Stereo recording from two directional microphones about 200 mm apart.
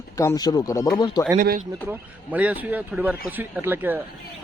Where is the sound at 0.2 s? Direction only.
15° left (ahead or behind).